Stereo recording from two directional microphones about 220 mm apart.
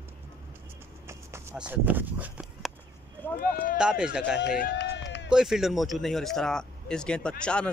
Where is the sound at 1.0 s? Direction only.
10° right (ahead or behind).